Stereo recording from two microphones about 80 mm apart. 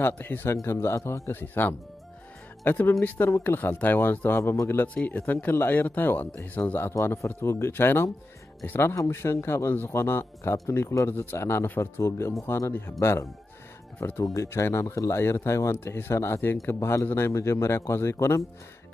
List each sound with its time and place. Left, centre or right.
0.0 s speech: left